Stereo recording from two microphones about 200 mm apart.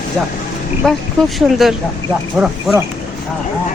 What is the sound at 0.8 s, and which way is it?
Speech, 5° left (ahead or behind).